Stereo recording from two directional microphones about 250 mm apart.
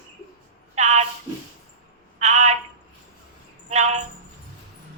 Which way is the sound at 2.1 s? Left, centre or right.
Right.